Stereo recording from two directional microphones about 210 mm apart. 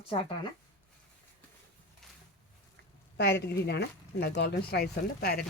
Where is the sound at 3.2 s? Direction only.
50° left (ahead or behind).